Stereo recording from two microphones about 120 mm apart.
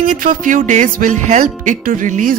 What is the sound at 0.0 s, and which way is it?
Speech, 90° right.